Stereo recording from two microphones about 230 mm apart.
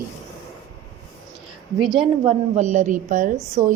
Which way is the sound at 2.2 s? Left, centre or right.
Right.